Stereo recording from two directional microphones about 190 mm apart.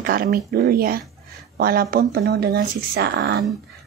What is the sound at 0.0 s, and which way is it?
Speech, 50° right (ahead or behind).